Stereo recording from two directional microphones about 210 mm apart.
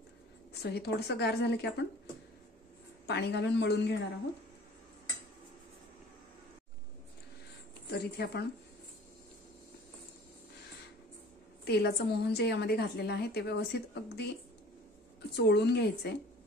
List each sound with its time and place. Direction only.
0.5 s a woman's voice: 50° left (ahead or behind)
3.1 s a woman's voice: 50° left (ahead or behind)
7.9 s a woman's voice: 50° left (ahead or behind)
11.6 s a woman's voice: 50° left (ahead or behind)
15.3 s a woman's voice: 55° left (ahead or behind)